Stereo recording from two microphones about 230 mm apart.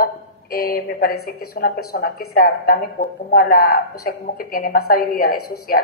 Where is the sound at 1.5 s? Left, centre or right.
Left.